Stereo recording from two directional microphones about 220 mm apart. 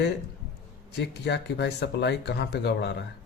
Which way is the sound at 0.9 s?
50° left (ahead or behind).